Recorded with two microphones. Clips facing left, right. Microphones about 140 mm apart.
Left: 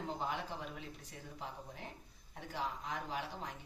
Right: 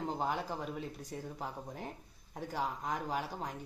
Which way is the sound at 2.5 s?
45° right (ahead or behind).